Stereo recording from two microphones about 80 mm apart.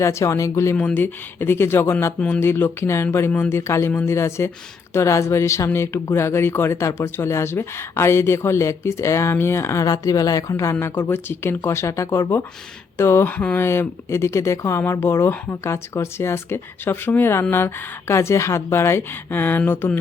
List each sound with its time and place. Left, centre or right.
0.0 s speech: left
0.8 s speech: left
2.1 s speech: centre
2.4 s speech: left
9.8 s speech: left
13.7 s speech: left